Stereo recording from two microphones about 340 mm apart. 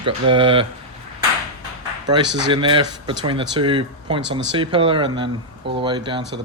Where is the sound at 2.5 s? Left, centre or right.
Centre.